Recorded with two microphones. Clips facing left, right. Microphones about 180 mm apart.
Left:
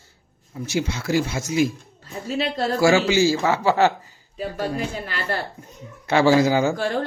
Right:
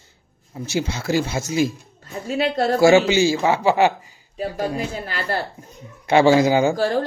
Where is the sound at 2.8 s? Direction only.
20° right (ahead or behind).